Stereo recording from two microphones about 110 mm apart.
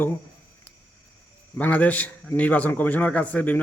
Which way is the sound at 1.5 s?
15° left (ahead or behind).